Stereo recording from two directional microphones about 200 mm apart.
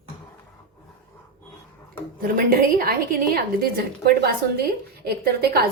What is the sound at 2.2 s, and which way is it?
A woman's voice, 45° right (ahead or behind).